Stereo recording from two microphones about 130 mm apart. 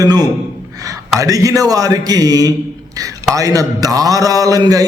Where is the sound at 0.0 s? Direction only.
30° right (ahead or behind).